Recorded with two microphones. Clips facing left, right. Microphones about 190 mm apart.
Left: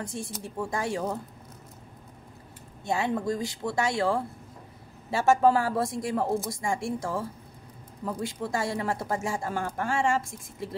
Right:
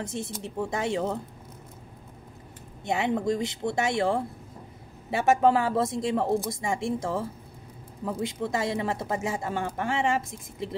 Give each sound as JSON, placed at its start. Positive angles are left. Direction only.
{"t": 0.0, "sound": "speech", "side_deg": -20}
{"t": 2.8, "sound": "speech", "side_deg": -20}